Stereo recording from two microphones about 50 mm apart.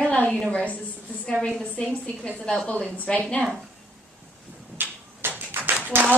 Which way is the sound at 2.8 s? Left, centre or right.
Left.